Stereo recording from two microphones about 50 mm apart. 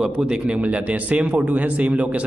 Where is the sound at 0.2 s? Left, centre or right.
Right.